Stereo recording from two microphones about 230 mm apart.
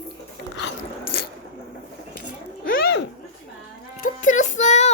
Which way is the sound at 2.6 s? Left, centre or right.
Left.